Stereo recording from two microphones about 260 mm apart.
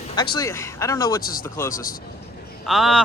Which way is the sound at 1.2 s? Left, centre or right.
Left.